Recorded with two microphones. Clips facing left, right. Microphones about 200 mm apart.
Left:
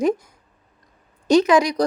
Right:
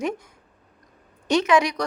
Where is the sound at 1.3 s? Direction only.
35° left (ahead or behind).